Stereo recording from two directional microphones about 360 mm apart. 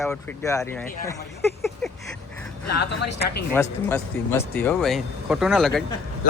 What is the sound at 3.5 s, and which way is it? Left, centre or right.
Speech, centre.